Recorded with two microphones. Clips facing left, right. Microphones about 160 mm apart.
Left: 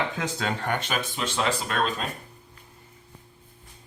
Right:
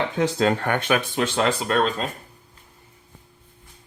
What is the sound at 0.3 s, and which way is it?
Speech, 55° right (ahead or behind).